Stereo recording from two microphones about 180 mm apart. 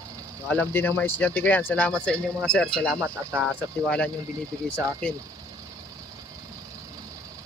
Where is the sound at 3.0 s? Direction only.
15° right (ahead or behind).